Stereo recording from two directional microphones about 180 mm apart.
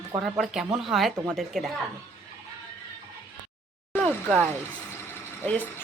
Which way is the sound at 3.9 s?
5° left (ahead or behind).